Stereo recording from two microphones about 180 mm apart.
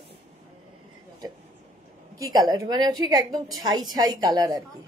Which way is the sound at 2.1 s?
20° right (ahead or behind).